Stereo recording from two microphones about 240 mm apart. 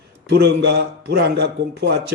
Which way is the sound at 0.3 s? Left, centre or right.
Right.